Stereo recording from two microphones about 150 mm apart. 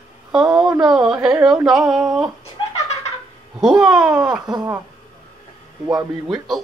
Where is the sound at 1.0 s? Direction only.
15° right (ahead or behind).